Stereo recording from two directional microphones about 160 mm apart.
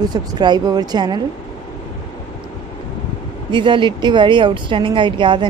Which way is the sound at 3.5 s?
30° right (ahead or behind).